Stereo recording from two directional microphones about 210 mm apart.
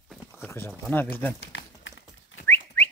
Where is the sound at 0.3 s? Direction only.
10° left (ahead or behind).